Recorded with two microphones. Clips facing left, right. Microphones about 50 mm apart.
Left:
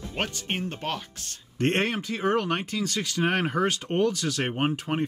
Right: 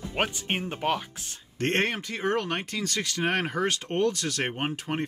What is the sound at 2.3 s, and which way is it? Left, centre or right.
Speech, centre.